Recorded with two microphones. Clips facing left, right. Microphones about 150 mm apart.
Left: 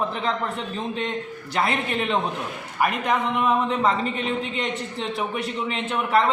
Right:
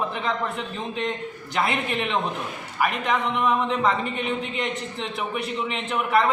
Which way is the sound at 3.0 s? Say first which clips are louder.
Even; 35° left (ahead or behind).